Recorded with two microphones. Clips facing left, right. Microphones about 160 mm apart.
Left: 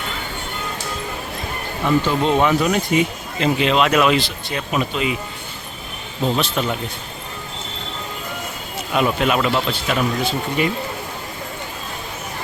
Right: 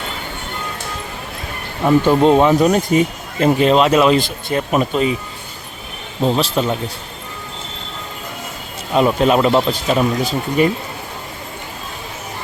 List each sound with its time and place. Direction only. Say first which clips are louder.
2.0 s speech: right 8 dB; 40° right (ahead or behind)
4.2 s speech: right 6 dB; 45° right (ahead or behind)
6.2 s speech: right 4 dB; 30° right (ahead or behind)
8.9 s speech: right 5 dB; 30° right (ahead or behind)